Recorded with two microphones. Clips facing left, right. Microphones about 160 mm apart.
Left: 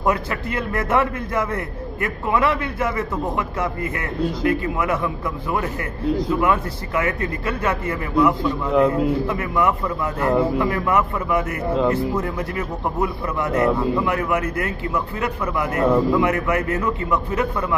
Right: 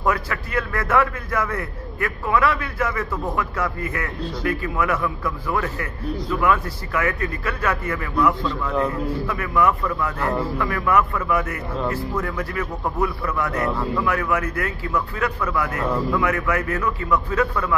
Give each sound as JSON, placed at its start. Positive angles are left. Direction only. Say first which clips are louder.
{"t": 0.0, "sound": "a man's voice", "louder": "left 2 dB", "side_deg": 20}